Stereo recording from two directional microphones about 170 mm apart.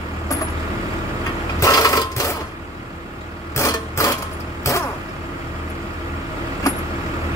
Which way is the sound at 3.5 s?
15° left (ahead or behind).